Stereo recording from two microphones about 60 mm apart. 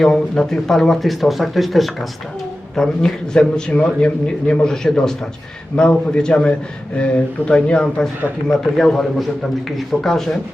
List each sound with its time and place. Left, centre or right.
0.0 s a man's voice: centre